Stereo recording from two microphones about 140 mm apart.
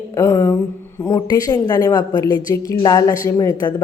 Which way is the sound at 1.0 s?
25° left (ahead or behind).